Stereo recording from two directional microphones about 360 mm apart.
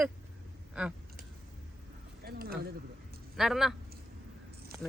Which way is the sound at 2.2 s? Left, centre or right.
Right.